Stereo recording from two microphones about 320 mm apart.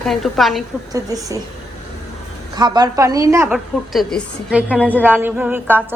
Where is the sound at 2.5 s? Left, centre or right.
Centre.